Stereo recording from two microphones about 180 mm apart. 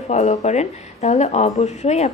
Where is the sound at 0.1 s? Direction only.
40° left (ahead or behind).